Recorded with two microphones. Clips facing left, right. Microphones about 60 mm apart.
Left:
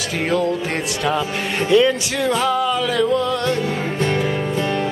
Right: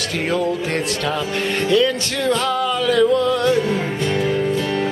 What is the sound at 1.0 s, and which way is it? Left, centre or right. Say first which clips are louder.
Music: left 1 dB; centre.